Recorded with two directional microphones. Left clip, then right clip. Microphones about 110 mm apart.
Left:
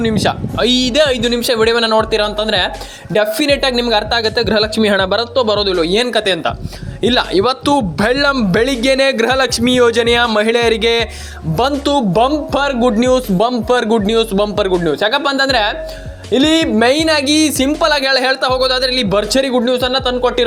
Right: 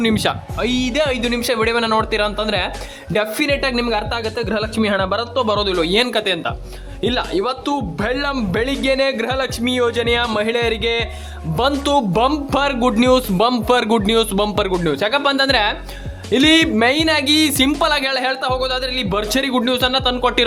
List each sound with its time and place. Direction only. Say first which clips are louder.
0.0 s speech: left 3 dB; centre (ahead or behind)
0.6 s speech: left 6 dB; 30° left (ahead or behind); by 6.2 s 10° left (ahead or behind)
6.2 s speech: left 5 dB; 35° left (ahead or behind)
7.2 s speech: left 8 dB; 50° left (ahead or behind)
11.7 s speech: left 2 dB; 5° left (ahead or behind)
15.0 s speech: even; 10° left (ahead or behind)
16.3 s speech: left 1 dB; 5° right (ahead or behind)
16.7 s speech: left 3 dB; 20° left (ahead or behind)
17.6 s speech: left 3 dB; 5° left (ahead or behind)
17.9 s speech: left 5 dB; 20° left (ahead or behind)
18.2 s speech: left 5 dB; 35° left (ahead or behind)
19.3 s speech: left 4 dB; 5° left (ahead or behind)